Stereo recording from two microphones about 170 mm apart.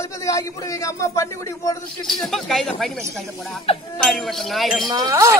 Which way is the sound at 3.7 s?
35° left (ahead or behind).